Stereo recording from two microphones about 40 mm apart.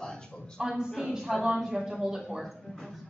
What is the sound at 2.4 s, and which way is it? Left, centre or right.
Speech, centre.